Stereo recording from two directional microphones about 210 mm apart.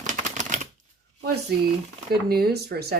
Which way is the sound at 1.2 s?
50° right (ahead or behind).